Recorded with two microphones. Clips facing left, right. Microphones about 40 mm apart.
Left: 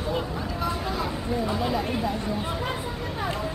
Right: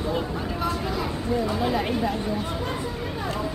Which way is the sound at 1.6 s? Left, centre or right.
Centre.